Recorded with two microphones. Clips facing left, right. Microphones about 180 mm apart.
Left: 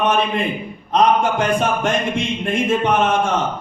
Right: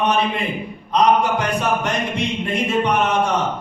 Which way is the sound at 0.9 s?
50° left (ahead or behind).